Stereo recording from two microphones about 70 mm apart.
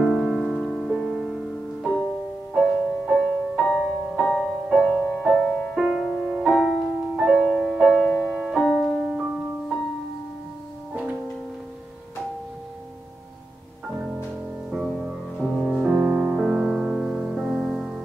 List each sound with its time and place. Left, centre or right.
0.0 s music: centre
1.8 s music: centre
8.0 s music: centre
9.0 s music: centre
10.9 s music: centre
13.8 s music: centre
16.4 s music: centre